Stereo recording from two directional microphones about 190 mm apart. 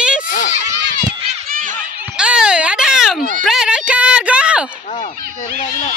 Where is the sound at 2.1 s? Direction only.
5° right (ahead or behind).